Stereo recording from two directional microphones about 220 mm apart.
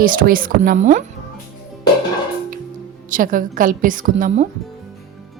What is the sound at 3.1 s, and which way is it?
A woman's voice, 40° right (ahead or behind).